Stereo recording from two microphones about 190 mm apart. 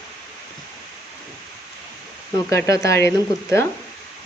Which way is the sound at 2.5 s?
15° left (ahead or behind).